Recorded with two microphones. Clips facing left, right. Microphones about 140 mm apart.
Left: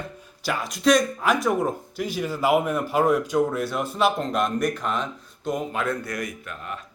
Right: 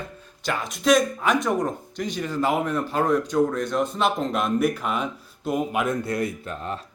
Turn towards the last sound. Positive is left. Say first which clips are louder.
# right 4 dB
turn(degrees=-30)  # may be behind; listen again after turning